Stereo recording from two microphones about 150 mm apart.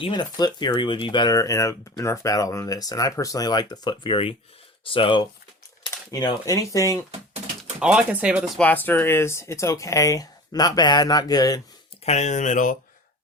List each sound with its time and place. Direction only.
0.0 s speech: 30° left (ahead or behind)
7.8 s speech: 5° right (ahead or behind)
8.5 s speech: 10° left (ahead or behind)
12.0 s speech: 50° left (ahead or behind)